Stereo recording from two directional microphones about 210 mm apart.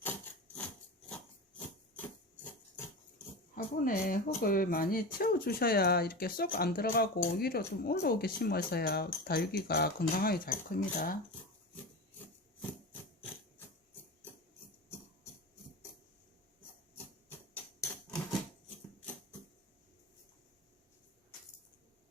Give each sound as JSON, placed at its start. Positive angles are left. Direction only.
{"t": 1.1, "sound": "a sound", "side_deg": 5}
{"t": 3.5, "sound": "speech", "side_deg": 40}
{"t": 17.5, "sound": "tick-tock", "side_deg": 10}